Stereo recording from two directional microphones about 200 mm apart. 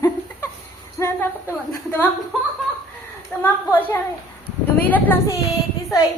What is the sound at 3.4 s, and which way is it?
A woman's voice, 10° left (ahead or behind).